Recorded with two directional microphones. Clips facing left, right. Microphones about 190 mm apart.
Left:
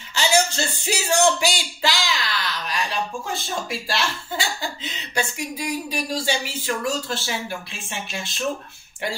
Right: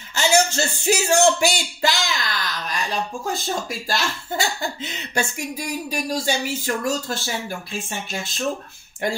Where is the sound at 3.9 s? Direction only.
45° right (ahead or behind).